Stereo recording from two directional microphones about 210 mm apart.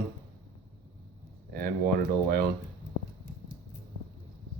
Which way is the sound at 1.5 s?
45° right (ahead or behind).